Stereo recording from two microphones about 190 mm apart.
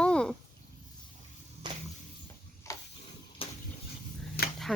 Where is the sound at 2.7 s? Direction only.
15° left (ahead or behind).